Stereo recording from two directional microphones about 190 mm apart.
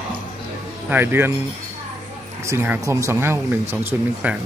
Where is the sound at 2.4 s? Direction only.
15° right (ahead or behind).